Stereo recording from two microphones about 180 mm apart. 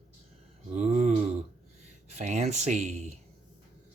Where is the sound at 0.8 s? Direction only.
40° right (ahead or behind).